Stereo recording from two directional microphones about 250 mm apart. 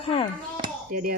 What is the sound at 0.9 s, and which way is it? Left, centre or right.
Speech, right.